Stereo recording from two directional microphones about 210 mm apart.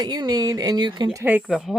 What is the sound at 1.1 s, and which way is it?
Speech, 10° right (ahead or behind).